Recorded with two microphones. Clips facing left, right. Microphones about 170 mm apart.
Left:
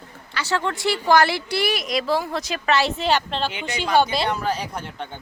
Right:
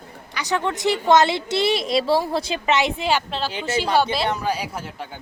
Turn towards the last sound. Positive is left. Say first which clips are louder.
# even
turn(degrees=-5)  # may be behind; listen again after turning